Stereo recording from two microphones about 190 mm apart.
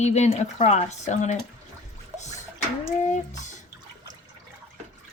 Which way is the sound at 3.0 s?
40° left (ahead or behind).